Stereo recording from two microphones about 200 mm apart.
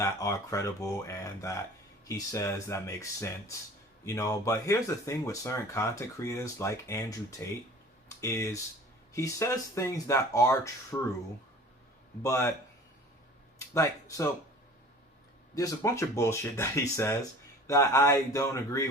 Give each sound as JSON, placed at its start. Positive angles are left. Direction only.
{"t": 0.0, "sound": "speech", "side_deg": 15}
{"t": 12.2, "sound": "speech", "side_deg": 15}
{"t": 13.7, "sound": "speech", "side_deg": 15}
{"t": 15.5, "sound": "speech", "side_deg": 15}